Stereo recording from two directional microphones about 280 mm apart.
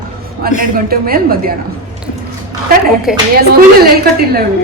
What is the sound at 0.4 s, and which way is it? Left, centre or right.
Speech, right.